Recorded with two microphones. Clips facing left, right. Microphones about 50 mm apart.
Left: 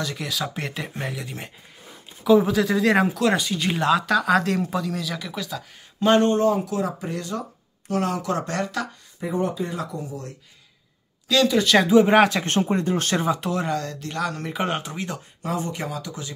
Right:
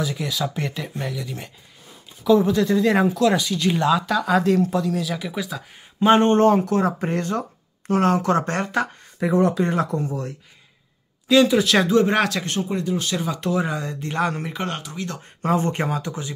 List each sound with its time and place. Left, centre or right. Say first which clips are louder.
0.0 s speech: right 3 dB; centre
6.2 s speech: right 4 dB; right
9.2 s speech: right 6 dB; right
9.7 s speech: right 7 dB; right
11.2 s speech: right 4 dB; centre
11.5 s speech: even; centre
11.9 s speech: left 3 dB; centre
12.4 s speech: left 2 dB; left
13.4 s speech: right 3 dB; centre
13.7 s speech: even; centre
14.5 s speech: left 2 dB; centre
14.8 s speech: left 1 dB; left
15.4 s speech: right 6 dB; right